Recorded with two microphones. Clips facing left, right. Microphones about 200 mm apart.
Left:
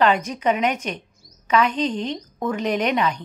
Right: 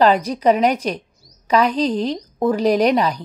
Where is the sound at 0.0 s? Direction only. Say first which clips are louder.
Right 5 dB; 35° right (ahead or behind).